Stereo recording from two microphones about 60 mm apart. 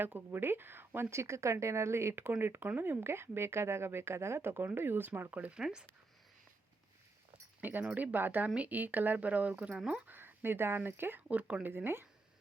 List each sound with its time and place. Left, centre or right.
0.0 s speech: right
1.1 s speech: right
5.5 s speech: centre
7.6 s speech: right
11.3 s speech: right
11.7 s speech: right